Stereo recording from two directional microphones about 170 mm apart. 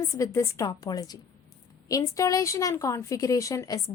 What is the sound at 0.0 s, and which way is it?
A woman's voice, 20° left (ahead or behind).